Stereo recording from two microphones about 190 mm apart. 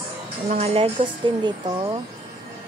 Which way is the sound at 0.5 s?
30° right (ahead or behind).